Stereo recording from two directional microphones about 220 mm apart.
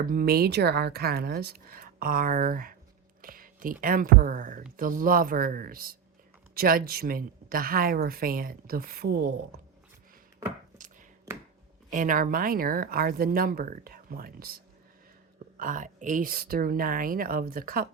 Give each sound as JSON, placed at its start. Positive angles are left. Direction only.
{"t": 0.0, "sound": "a woman's voice", "side_deg": -40}
{"t": 11.9, "sound": "a woman's voice", "side_deg": -35}